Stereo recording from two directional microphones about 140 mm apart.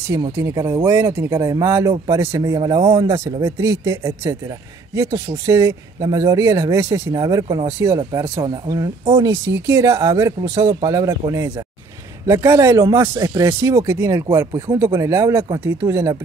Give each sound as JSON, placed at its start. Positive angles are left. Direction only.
{"t": 0.2, "sound": "a man's voice", "side_deg": -25}